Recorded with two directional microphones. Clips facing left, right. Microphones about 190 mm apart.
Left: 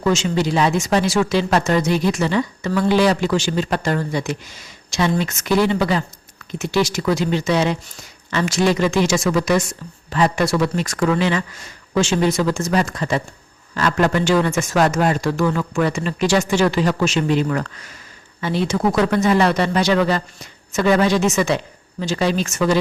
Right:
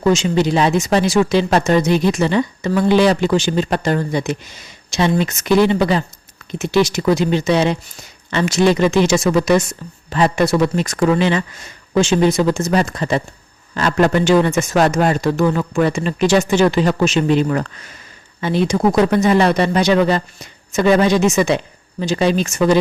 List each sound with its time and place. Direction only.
0.0 s speech: 20° right (ahead or behind)